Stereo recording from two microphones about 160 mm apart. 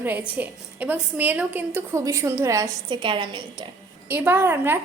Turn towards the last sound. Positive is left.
turn(degrees=-15)  # may be behind; listen again after turning